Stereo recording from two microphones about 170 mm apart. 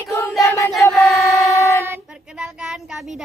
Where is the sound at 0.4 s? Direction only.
20° left (ahead or behind).